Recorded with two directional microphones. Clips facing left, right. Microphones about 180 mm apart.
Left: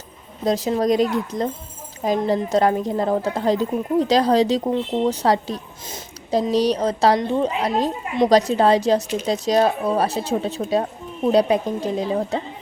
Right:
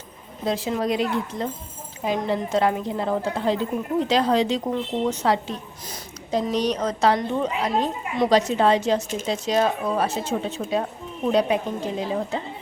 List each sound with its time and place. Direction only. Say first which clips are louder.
0.4 s a woman's voice: left 5 dB; 40° left (ahead or behind)